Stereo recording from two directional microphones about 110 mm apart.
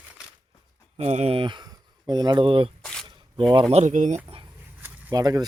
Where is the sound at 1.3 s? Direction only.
45° right (ahead or behind).